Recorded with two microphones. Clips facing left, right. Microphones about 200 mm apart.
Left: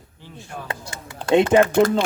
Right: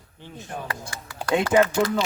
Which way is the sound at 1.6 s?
50° left (ahead or behind).